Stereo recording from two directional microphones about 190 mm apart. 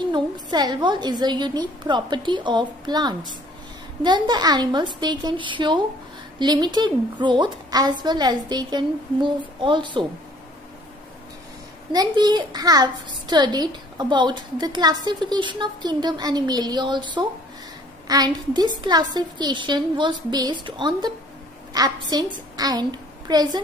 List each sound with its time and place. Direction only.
0.1 s a child's voice: 25° right (ahead or behind)
11.9 s a child's voice: 20° right (ahead or behind)